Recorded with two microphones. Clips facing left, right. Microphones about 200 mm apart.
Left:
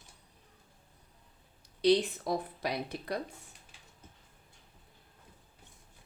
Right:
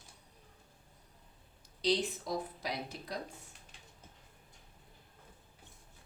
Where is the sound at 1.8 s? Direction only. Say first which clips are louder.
Left 6 dB; 60° left (ahead or behind).